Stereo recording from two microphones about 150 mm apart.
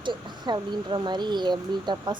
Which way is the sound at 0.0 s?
30° right (ahead or behind).